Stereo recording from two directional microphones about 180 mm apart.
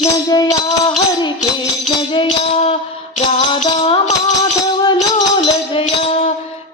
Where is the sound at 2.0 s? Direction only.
30° left (ahead or behind).